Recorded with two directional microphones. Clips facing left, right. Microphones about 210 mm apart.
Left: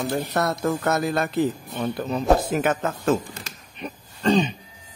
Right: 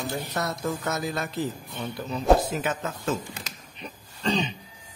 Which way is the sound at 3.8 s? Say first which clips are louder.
Left 8 dB; 50° left (ahead or behind).